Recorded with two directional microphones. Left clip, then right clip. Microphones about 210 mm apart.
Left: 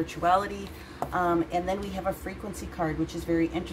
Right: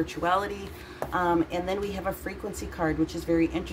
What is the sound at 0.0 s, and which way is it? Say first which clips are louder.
A woman's voice: left 2 dB; 15° right (ahead or behind).